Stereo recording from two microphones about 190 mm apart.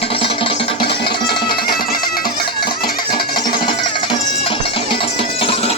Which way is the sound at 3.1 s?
25° left (ahead or behind).